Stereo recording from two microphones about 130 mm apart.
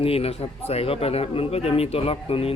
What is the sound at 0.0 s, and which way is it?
A man's voice, 50° left (ahead or behind).